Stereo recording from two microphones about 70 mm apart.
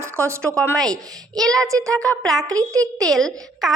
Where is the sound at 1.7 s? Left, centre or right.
Right.